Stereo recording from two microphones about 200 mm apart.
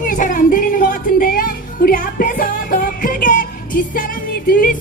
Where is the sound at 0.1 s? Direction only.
40° left (ahead or behind).